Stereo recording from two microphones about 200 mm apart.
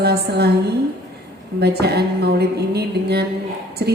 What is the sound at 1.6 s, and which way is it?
Music, 55° right (ahead or behind).